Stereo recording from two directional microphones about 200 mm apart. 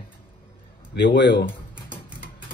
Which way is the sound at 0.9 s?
60° left (ahead or behind).